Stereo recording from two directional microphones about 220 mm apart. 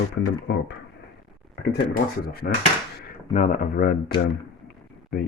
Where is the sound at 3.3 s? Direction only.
35° left (ahead or behind).